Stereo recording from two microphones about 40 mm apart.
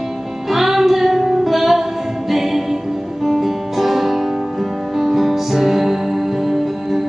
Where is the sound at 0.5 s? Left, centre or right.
Centre.